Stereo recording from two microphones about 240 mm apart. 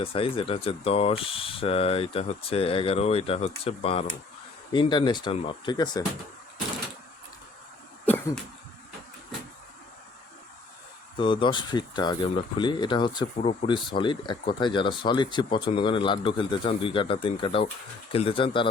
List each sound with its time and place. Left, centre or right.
0.0 s speech: left
11.2 s speech: left